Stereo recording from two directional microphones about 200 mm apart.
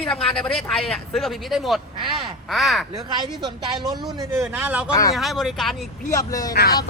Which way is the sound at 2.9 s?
20° right (ahead or behind).